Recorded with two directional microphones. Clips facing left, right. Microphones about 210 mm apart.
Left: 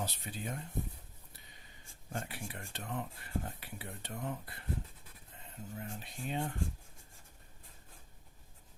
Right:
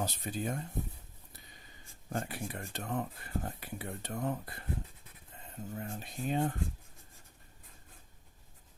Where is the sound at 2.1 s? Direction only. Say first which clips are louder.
Right 5 dB; 45° right (ahead or behind).